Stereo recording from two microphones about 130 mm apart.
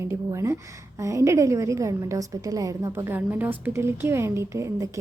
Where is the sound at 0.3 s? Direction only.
25° right (ahead or behind).